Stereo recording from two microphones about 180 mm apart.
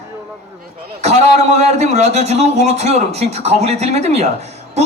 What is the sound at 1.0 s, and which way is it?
A woman's voice, 40° right (ahead or behind).